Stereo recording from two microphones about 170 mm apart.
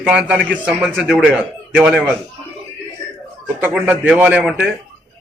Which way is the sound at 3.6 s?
10° right (ahead or behind).